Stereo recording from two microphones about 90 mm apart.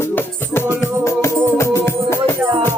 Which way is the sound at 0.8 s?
30° left (ahead or behind).